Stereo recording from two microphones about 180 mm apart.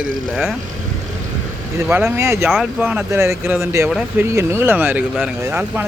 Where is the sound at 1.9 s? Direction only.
15° right (ahead or behind).